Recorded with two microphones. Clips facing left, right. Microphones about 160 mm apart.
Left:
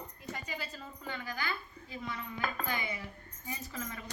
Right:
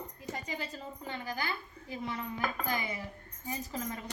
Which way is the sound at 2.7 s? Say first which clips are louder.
Right 2 dB; 35° right (ahead or behind).